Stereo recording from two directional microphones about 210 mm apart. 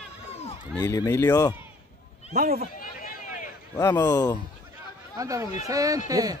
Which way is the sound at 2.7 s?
40° left (ahead or behind).